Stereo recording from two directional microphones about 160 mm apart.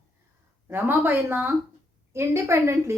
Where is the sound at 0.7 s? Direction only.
15° right (ahead or behind).